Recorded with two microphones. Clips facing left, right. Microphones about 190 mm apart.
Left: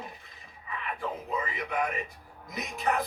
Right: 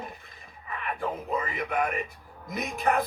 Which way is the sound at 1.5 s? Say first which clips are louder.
Right 3 dB; 50° right (ahead or behind).